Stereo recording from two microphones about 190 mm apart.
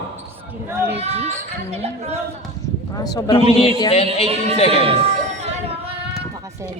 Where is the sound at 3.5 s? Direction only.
30° left (ahead or behind).